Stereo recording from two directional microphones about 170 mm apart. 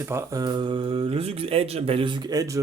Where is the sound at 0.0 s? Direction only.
15° right (ahead or behind).